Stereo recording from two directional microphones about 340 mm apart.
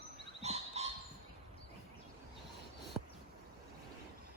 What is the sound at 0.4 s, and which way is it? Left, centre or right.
Dog, centre.